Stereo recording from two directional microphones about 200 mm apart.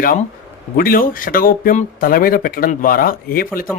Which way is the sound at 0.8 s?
45° left (ahead or behind).